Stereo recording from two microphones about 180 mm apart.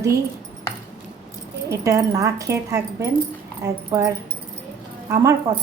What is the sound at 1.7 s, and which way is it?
A woman's voice, 15° right (ahead or behind).